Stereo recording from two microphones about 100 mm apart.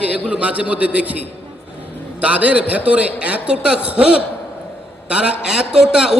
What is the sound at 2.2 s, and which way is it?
A man's voice, 15° right (ahead or behind).